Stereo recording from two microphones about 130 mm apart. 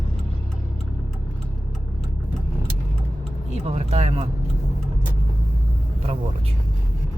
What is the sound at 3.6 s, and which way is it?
Speech, 55° right (ahead or behind).